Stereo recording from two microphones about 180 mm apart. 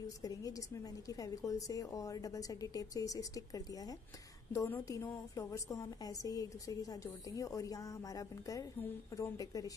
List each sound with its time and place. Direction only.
0.0 s a woman's voice: 20° left (ahead or behind)